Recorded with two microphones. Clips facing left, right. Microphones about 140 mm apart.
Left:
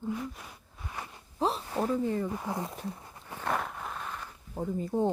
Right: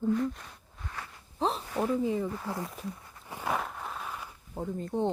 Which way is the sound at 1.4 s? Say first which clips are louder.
Even; centre (ahead or behind).